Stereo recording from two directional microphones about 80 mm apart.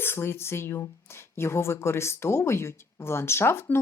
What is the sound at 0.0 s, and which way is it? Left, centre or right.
Speech, left.